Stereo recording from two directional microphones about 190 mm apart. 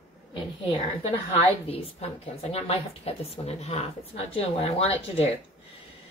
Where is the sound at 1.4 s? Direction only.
30° left (ahead or behind).